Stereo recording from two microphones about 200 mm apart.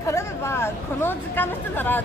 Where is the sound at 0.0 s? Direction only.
15° left (ahead or behind).